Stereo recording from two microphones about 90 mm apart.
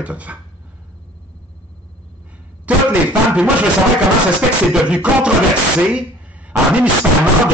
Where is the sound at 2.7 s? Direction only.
15° right (ahead or behind).